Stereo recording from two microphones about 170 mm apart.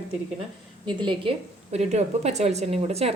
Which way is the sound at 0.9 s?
30° right (ahead or behind).